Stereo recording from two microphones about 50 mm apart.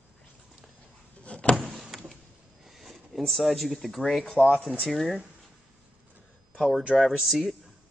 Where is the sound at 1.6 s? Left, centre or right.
Centre.